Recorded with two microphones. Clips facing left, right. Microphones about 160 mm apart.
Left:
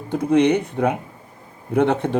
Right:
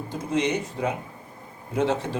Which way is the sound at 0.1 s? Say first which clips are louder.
Left 9 dB; 60° left (ahead or behind).